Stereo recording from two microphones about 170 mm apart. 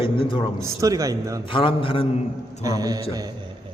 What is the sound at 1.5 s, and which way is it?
Speech, 30° left (ahead or behind).